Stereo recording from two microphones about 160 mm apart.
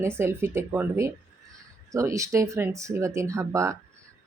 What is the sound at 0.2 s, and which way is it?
Speech, 15° right (ahead or behind).